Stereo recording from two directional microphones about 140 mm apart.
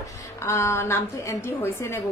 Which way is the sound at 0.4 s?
20° left (ahead or behind).